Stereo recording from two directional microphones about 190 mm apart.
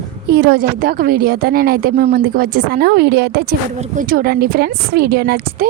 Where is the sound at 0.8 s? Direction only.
50° right (ahead or behind).